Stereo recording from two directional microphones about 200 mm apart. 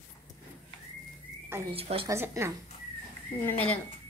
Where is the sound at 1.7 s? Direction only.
30° right (ahead or behind).